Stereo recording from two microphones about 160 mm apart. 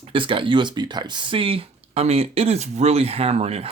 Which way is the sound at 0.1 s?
30° right (ahead or behind).